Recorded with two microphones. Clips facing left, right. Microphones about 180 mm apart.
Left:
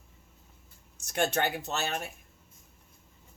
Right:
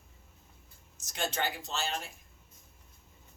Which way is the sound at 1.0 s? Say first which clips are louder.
Left 6 dB; 65° left (ahead or behind).